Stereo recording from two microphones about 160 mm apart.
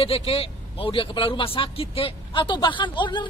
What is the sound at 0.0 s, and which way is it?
Speech, 40° left (ahead or behind).